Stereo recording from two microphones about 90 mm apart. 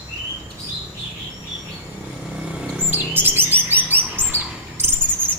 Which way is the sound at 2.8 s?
25° right (ahead or behind).